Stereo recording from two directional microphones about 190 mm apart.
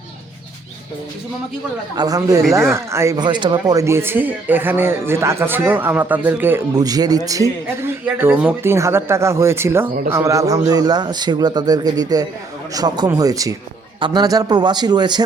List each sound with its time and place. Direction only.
2.0 s a man's voice: 20° right (ahead or behind)